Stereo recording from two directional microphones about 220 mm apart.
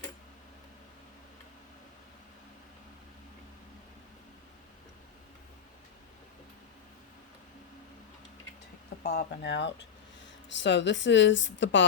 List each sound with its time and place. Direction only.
9.0 s a woman's voice: 45° left (ahead or behind)